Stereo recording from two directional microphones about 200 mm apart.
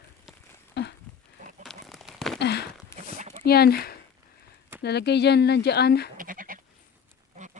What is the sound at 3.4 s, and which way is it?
Speech, 50° left (ahead or behind).